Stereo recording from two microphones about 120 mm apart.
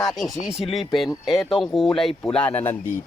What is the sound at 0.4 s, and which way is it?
Speech, centre (ahead or behind).